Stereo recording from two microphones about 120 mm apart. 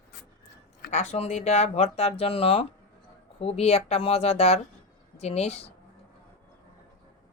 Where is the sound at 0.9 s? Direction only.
70° left (ahead or behind).